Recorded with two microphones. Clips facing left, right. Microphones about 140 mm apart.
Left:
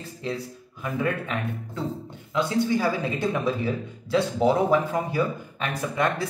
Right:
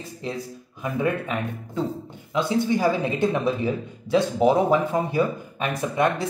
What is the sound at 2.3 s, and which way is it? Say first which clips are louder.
Speech: right 1 dB; 20° right (ahead or behind).